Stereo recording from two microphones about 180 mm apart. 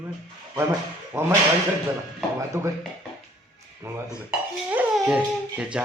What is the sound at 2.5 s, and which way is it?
Speech, 15° right (ahead or behind).